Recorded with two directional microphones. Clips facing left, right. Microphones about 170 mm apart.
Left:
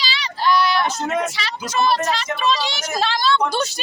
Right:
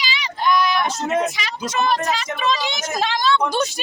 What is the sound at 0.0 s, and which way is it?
Speech, 15° right (ahead or behind).